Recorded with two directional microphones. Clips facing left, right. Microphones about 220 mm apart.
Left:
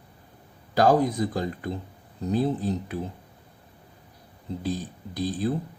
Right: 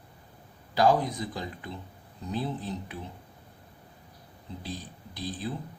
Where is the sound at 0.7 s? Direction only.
45° left (ahead or behind).